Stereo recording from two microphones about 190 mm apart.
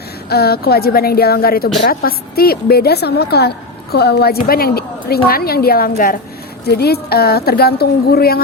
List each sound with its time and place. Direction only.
0.3 s a woman's voice: 55° left (ahead or behind)